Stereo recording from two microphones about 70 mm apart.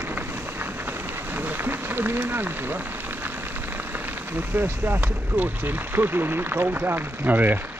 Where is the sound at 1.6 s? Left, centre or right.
Right.